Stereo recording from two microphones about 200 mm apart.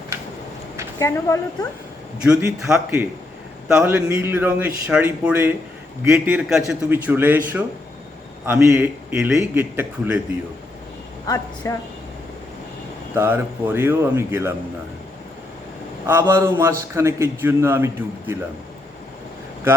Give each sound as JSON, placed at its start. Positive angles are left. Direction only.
{"t": 0.9, "sound": "a woman's voice", "side_deg": 15}
{"t": 2.2, "sound": "a man's voice", "side_deg": -5}
{"t": 11.6, "sound": "a woman's voice", "side_deg": 15}
{"t": 13.1, "sound": "a man's voice", "side_deg": -10}
{"t": 16.0, "sound": "a man's voice", "side_deg": -15}